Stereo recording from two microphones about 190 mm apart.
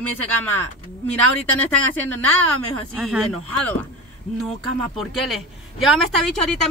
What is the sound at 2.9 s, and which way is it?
Speech, centre (ahead or behind).